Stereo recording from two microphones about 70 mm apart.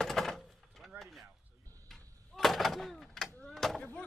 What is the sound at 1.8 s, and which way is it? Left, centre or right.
Door, centre.